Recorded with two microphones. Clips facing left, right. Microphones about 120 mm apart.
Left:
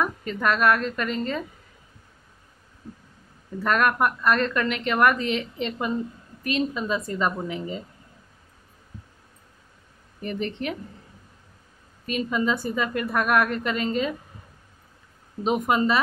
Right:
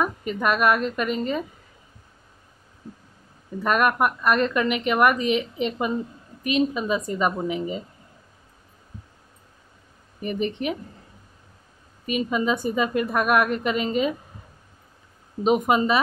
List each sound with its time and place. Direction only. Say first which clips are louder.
0.0 s a woman's voice: right 1 dB; 15° right (ahead or behind)
3.6 s a woman's voice: right 1 dB; 15° right (ahead or behind)
10.2 s a woman's voice: right 3 dB; 15° right (ahead or behind)
12.1 s a woman's voice: right 1 dB; 15° right (ahead or behind)
15.4 s speech: right 2 dB; 20° right (ahead or behind)